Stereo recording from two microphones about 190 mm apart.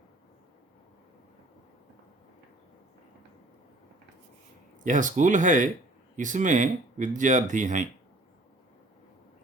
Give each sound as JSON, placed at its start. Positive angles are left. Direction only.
{"t": 4.8, "sound": "speech", "side_deg": -40}